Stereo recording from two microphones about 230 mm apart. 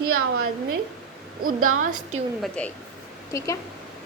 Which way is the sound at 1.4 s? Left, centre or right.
Right.